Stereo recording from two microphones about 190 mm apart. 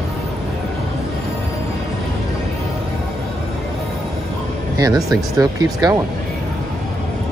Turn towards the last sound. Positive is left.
turn(degrees=-20)  # may be behind; listen again after turning